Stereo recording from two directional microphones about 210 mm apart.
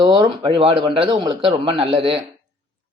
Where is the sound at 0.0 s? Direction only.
25° right (ahead or behind).